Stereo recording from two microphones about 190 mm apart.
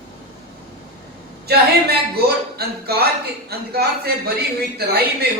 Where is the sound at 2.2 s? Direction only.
55° right (ahead or behind).